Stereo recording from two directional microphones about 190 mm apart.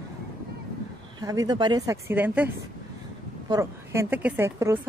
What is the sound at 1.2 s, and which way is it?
A woman's voice, 20° right (ahead or behind).